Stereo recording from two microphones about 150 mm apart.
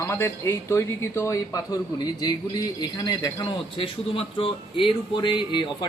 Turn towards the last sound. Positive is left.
turn(degrees=30)  # may be behind; listen again after turning